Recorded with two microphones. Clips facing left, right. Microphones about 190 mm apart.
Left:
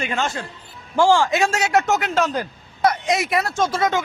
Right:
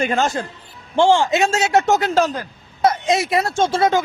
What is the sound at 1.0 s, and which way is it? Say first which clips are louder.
Speech: right 2 dB; 20° right (ahead or behind).